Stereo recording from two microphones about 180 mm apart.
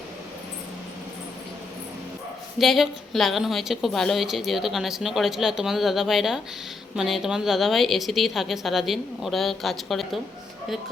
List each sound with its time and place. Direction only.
2.6 s a woman's voice: centre (ahead or behind)